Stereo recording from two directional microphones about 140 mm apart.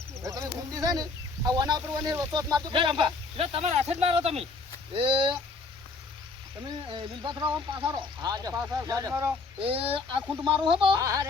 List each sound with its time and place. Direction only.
0.2 s speech: 25° right (ahead or behind)
6.6 s speech: 30° right (ahead or behind)
9.6 s speech: 40° right (ahead or behind)
11.0 s speech: 25° right (ahead or behind)